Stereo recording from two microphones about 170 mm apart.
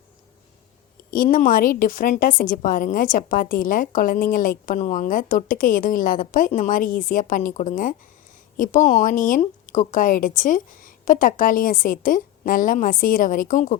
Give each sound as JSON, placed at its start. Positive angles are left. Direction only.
{"t": 1.1, "sound": "a woman's voice", "side_deg": 55}